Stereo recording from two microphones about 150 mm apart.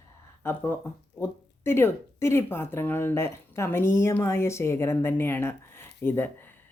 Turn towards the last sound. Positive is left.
turn(degrees=15)  # may be behind; listen again after turning